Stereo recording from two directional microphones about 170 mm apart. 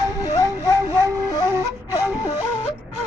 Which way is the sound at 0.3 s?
20° left (ahead or behind).